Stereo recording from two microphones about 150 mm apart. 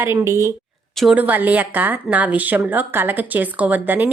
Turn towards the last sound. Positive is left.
turn(degrees=-10)  # may be behind; listen again after turning